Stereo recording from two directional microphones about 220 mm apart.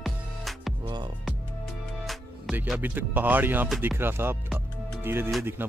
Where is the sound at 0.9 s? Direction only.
20° right (ahead or behind).